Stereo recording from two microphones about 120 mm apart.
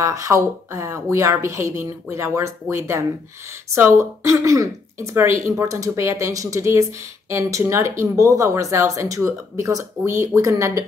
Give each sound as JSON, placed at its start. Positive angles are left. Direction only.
{"t": 0.0, "sound": "speech", "side_deg": -25}